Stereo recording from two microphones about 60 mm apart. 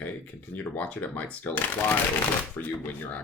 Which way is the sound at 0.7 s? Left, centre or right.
Left.